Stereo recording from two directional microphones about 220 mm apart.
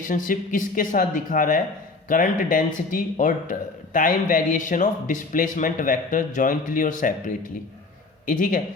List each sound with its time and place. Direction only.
0.0 s speech: 35° left (ahead or behind)